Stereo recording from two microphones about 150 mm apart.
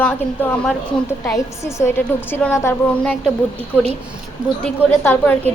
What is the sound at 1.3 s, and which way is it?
A woman's voice, 20° left (ahead or behind).